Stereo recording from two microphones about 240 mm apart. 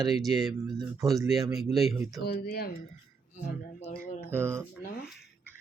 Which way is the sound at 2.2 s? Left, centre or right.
Left.